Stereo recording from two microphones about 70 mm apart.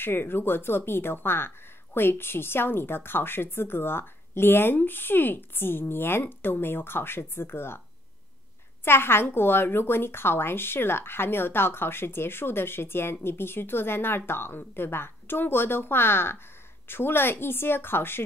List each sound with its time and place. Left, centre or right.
0.0 s speech: left
8.8 s speech: left